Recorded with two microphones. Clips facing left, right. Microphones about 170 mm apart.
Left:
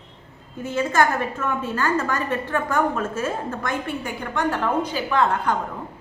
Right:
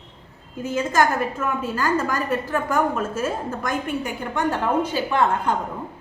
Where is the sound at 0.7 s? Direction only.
10° right (ahead or behind).